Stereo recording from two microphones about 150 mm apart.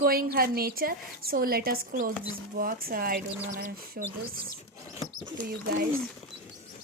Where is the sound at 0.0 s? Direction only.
80° right.